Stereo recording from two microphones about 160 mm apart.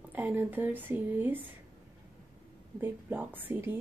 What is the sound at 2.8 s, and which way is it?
Speech, 15° right (ahead or behind).